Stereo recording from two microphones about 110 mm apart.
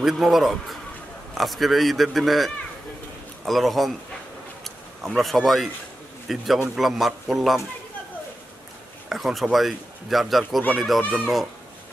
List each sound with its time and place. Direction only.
0.0 s speech: centre (ahead or behind)
9.1 s speech: centre (ahead or behind)